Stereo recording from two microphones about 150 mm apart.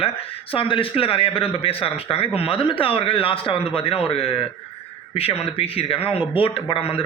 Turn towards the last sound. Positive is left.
turn(degrees=40)  # may be behind; listen again after turning